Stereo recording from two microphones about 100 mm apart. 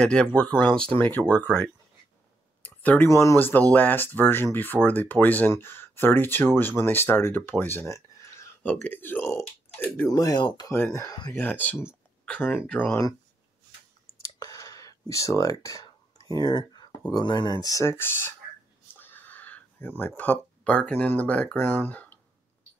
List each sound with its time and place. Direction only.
0.0 s speech: 10° left (ahead or behind)
2.6 s a sound: 15° left (ahead or behind)
3.1 s speech: 30° left (ahead or behind)
10.0 s speech: 40° left (ahead or behind)
10.7 s speech: 25° left (ahead or behind)
11.3 s speech: 15° left (ahead or behind)
14.4 s a sound: 35° left (ahead or behind)
15.6 s whispering: 35° left (ahead or behind)
17.1 s speech: 45° left (ahead or behind); by 22.1 s 15° left (ahead or behind)